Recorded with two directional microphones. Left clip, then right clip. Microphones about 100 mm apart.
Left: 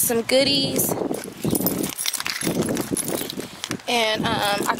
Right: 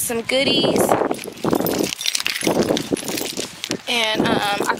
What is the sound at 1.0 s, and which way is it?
Clip-clop, 55° right (ahead or behind).